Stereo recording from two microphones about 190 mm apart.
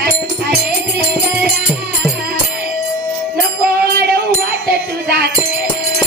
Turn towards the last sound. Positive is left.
turn(degrees=-60)  # may be behind; listen again after turning